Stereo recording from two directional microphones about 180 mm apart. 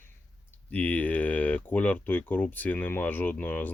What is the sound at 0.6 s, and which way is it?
Speech, 10° left (ahead or behind).